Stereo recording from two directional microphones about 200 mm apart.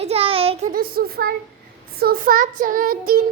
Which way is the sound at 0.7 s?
50° right (ahead or behind).